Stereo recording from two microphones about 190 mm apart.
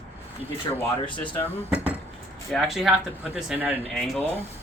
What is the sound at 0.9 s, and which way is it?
Speech, 25° left (ahead or behind).